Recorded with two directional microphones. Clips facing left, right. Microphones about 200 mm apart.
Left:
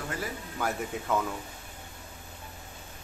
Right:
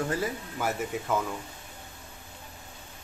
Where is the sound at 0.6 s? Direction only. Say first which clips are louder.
Right 1 dB; centre (ahead or behind).